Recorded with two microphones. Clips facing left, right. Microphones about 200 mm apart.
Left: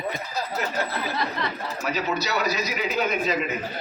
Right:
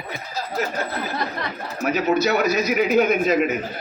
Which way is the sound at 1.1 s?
50° right (ahead or behind).